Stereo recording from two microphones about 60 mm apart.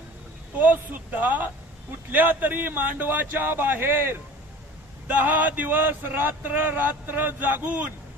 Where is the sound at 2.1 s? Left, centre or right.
Right.